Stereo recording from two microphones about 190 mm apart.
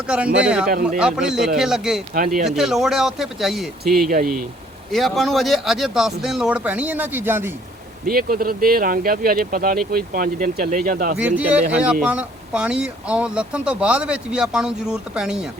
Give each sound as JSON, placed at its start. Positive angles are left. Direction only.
{"t": 0.4, "sound": "speech", "side_deg": -5}
{"t": 2.1, "sound": "speech", "side_deg": -45}
{"t": 2.4, "sound": "speech", "side_deg": 0}
{"t": 4.1, "sound": "speech", "side_deg": -50}
{"t": 4.9, "sound": "speech", "side_deg": 0}
{"t": 8.0, "sound": "speech", "side_deg": -50}
{"t": 11.2, "sound": "speech", "side_deg": -5}